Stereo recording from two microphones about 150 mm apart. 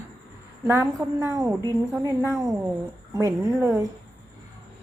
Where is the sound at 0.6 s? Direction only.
15° right (ahead or behind).